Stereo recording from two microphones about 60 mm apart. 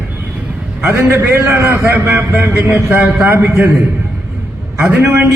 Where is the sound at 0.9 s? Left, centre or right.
Right.